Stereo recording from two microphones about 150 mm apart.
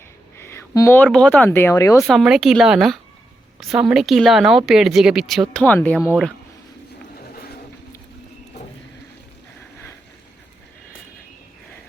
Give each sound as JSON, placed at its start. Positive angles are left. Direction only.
{"t": 0.3, "sound": "a sound", "side_deg": 15}
{"t": 0.9, "sound": "speech", "side_deg": 10}
{"t": 2.0, "sound": "speech", "side_deg": 0}
{"t": 6.0, "sound": "speech", "side_deg": -5}